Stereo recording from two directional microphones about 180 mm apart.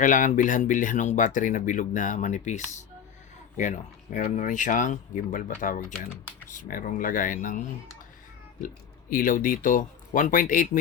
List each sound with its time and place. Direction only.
0.0 s speech: 45° left (ahead or behind)
8.6 s speech: 50° left (ahead or behind)